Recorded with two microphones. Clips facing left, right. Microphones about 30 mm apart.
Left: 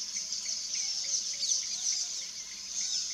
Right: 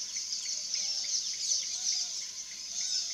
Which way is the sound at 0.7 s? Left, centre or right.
Centre.